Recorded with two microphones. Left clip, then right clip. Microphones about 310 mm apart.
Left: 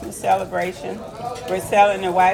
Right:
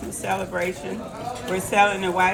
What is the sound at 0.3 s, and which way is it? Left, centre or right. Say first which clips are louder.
Speech: left 6 dB; left.